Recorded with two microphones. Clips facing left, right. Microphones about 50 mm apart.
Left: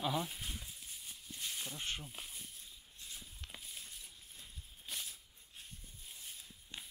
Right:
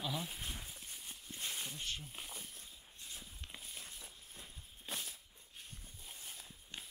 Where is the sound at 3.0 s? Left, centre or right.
Centre.